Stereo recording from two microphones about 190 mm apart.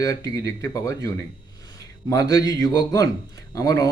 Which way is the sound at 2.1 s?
20° left (ahead or behind).